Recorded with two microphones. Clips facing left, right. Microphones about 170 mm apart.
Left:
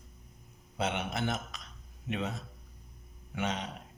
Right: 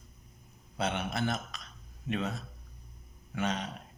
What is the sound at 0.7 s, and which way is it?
Speech, 20° left (ahead or behind).